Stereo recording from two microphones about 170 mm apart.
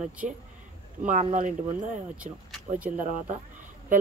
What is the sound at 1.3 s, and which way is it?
Speech, 50° right (ahead or behind).